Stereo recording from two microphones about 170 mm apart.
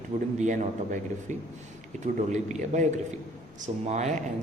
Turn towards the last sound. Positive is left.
turn(degrees=-45)  # may be behind; listen again after turning